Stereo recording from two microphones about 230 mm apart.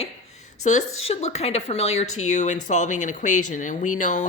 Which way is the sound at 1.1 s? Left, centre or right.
Left.